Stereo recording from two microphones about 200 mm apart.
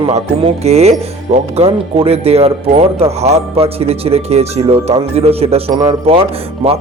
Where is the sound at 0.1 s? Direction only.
30° right (ahead or behind).